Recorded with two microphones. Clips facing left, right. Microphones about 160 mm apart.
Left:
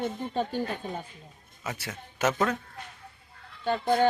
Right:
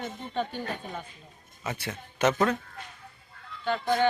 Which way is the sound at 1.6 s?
Centre (ahead or behind).